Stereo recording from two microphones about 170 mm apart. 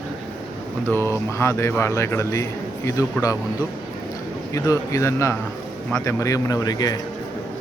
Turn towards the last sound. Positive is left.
turn(degrees=20)  # may be behind; listen again after turning